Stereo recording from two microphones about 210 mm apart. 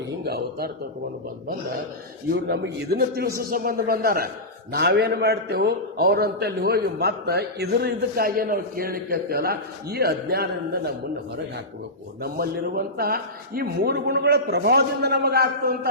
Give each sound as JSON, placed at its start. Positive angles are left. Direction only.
{"t": 0.3, "sound": "a man's voice", "side_deg": -50}
{"t": 2.3, "sound": "a man's voice", "side_deg": -50}
{"t": 12.2, "sound": "a man's voice", "side_deg": -45}